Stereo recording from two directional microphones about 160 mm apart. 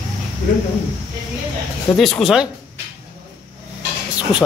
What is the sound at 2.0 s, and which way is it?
Speech, centre (ahead or behind).